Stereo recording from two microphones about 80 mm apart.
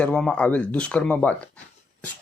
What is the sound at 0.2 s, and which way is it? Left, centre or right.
Speech, centre.